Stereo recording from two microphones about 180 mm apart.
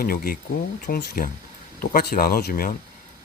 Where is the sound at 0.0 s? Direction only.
55° left (ahead or behind).